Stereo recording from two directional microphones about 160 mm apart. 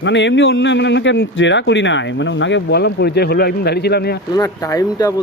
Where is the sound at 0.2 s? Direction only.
90° left.